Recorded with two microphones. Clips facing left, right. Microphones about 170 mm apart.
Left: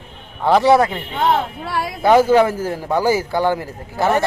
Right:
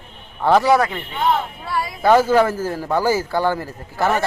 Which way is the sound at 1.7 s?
65° left (ahead or behind).